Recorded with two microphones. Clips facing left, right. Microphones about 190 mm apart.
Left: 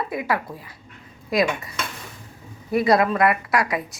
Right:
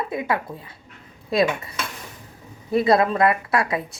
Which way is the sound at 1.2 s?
25° right (ahead or behind).